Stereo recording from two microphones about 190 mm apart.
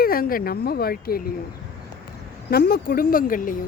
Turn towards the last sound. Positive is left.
turn(degrees=45)  # may be behind; listen again after turning